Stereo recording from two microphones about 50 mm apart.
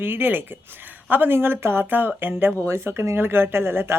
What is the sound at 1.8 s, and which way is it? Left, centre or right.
Speech, right.